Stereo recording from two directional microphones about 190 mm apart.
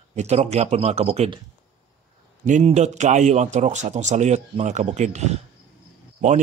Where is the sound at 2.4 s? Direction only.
40° right (ahead or behind).